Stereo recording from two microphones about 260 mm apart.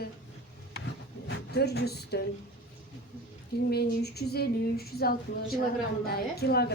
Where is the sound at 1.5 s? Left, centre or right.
Left.